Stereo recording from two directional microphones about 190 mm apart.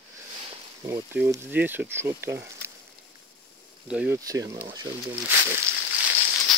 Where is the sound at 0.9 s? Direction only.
15° right (ahead or behind).